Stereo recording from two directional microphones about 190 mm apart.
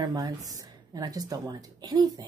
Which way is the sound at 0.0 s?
20° right (ahead or behind).